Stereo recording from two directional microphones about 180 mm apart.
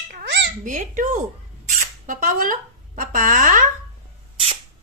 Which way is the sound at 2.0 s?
50° right (ahead or behind).